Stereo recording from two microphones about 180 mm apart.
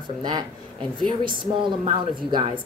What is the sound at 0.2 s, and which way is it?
A woman's voice, 25° right (ahead or behind).